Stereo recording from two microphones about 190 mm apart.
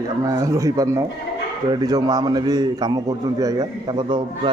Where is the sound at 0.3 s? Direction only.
15° right (ahead or behind).